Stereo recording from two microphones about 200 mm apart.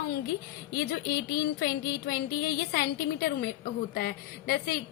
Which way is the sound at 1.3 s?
50° left (ahead or behind).